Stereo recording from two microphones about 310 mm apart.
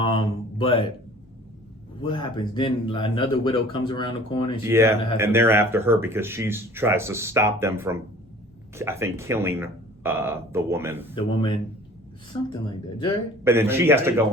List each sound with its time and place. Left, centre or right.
0.0 s a sound: centre
2.0 s speech: centre
4.6 s speech: centre
11.1 s speech: centre
13.4 s speech: centre